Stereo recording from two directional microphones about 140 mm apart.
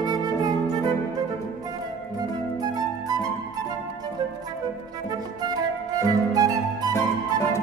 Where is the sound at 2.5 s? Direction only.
30° right (ahead or behind).